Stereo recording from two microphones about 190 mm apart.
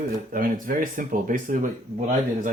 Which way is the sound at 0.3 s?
45° right (ahead or behind).